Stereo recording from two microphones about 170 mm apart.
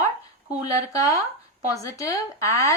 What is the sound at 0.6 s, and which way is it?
Speech, 20° left (ahead or behind).